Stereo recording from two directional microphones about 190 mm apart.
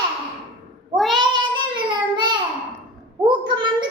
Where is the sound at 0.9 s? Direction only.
Centre (ahead or behind).